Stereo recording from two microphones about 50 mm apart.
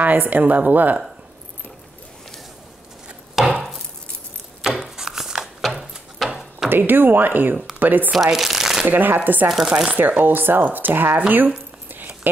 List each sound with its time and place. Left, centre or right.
0.0 s speech: right
3.4 s wood: centre
4.6 s a sound: centre
6.7 s speech: right
8.1 s shuffling cards: centre
8.8 s speech: right
9.7 s speech: centre
9.9 s speech: right